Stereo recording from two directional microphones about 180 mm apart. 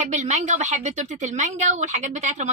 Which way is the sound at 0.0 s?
40° right (ahead or behind).